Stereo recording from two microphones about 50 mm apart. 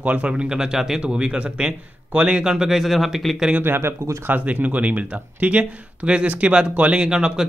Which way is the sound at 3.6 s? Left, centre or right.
Right.